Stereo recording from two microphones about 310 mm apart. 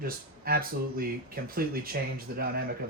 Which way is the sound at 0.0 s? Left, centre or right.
Right.